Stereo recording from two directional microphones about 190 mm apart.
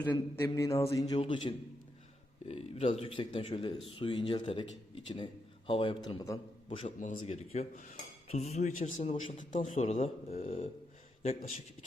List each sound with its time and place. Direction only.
0.0 s a sound: 10° left (ahead or behind)
1.5 s a man's voice: 25° left (ahead or behind)
6.7 s a man's voice: 35° left (ahead or behind)